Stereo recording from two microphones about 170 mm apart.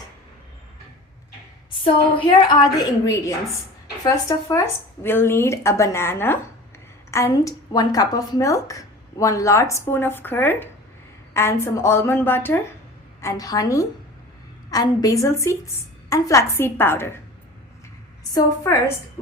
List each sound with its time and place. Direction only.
1.8 s a woman's voice: 30° left (ahead or behind); by 17.2 s 15° left (ahead or behind)
18.2 s a woman's voice: 20° left (ahead or behind)